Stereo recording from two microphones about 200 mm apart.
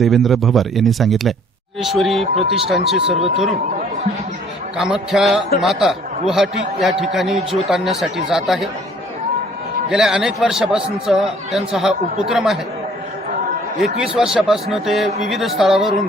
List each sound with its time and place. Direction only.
0.0 s speech: centre (ahead or behind)
3.0 s speech: 30° right (ahead or behind)
4.8 s speech: centre (ahead or behind)
9.9 s speech: 5° right (ahead or behind)
14.2 s speech: 5° right (ahead or behind)